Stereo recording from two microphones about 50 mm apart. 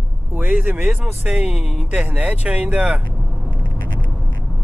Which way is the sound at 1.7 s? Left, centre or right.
Right.